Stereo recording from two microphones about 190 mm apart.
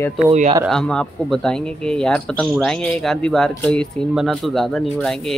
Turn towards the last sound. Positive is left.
turn(degrees=0)  # may be behind; listen again after turning